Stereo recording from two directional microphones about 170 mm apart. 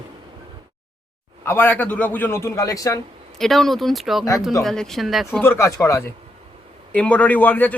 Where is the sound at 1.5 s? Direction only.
10° left (ahead or behind).